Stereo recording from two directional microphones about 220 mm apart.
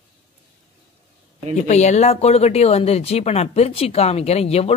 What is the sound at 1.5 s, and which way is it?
Speech, 30° left (ahead or behind).